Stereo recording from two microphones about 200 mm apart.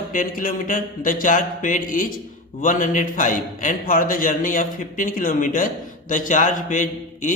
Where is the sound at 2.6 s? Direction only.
40° left (ahead or behind).